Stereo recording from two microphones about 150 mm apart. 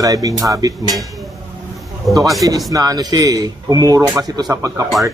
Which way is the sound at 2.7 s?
25° right (ahead or behind).